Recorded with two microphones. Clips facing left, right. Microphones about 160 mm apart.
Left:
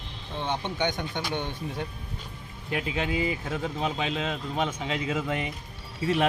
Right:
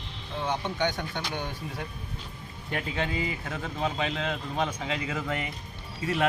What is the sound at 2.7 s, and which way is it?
A man's voice, 10° left (ahead or behind).